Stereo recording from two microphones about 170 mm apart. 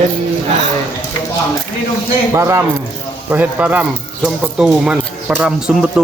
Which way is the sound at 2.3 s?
15° right (ahead or behind).